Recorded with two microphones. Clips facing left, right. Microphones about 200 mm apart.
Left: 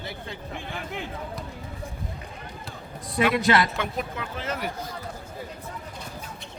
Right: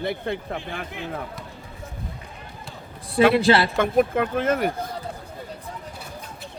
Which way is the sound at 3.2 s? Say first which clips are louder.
Right 5 dB; 30° right (ahead or behind).